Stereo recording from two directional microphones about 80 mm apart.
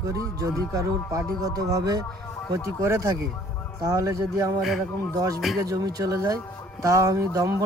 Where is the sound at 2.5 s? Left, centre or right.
Right.